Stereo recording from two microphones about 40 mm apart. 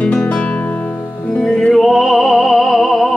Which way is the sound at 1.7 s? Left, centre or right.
Centre.